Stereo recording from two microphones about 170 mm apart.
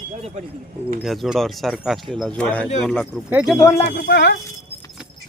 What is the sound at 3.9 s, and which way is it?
Speech, 70° left (ahead or behind).